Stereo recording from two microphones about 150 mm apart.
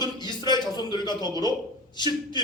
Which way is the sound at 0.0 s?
30° left (ahead or behind).